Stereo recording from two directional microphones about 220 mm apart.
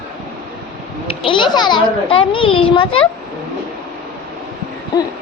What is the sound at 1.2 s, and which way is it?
A child's voice, 20° left (ahead or behind).